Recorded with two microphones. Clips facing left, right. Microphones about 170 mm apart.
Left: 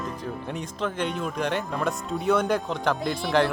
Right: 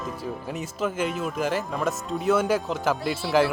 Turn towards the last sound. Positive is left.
turn(degrees=-5)  # may be behind; listen again after turning